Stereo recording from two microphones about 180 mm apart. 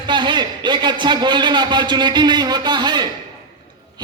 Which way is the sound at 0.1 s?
25° right (ahead or behind).